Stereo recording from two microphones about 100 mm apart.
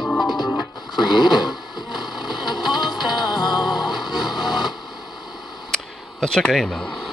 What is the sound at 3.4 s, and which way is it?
Music, 45° left (ahead or behind).